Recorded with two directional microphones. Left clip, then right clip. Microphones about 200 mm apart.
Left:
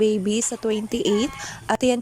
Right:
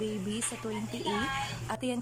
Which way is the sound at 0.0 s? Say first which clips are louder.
Left 14 dB; 30° left (ahead or behind).